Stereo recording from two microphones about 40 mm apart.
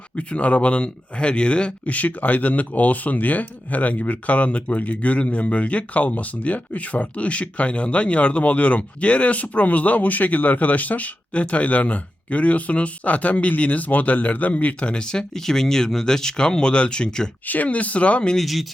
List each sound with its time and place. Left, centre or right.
0.2 s speech: left
2.0 s speech: left
15.4 s speech: centre
17.5 s speech: left
18.3 s speech: centre